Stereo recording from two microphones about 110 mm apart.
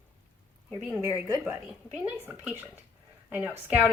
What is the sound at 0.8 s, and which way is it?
Speech, 25° right (ahead or behind).